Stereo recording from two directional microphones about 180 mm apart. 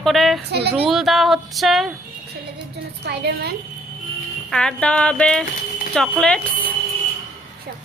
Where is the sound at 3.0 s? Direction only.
65° right (ahead or behind).